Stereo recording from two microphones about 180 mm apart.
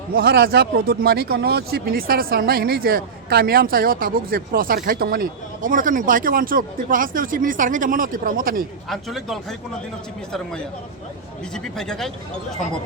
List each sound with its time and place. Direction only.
0.2 s speech: 60° right (ahead or behind)
8.9 s speech: centre (ahead or behind)
11.5 s speech: 5° left (ahead or behind)